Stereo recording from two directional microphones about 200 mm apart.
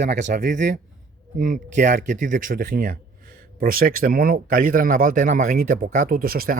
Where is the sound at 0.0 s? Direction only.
35° right (ahead or behind).